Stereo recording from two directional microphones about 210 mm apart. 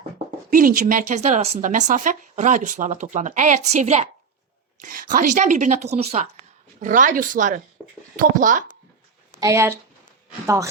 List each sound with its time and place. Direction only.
0.5 s speech: 40° right (ahead or behind)
9.4 s speech: 15° right (ahead or behind)